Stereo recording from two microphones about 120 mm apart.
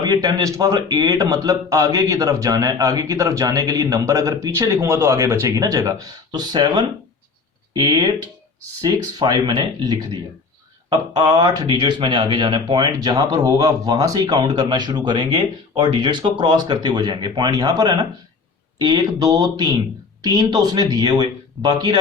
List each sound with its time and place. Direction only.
0.0 s speech: 35° right (ahead or behind)